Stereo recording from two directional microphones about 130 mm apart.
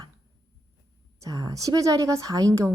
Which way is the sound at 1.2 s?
30° right (ahead or behind).